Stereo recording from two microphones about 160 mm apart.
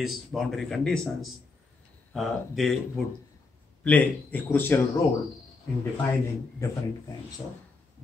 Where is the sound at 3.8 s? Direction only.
10° left (ahead or behind).